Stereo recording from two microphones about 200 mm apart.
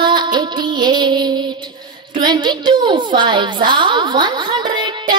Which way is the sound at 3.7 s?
25° right (ahead or behind).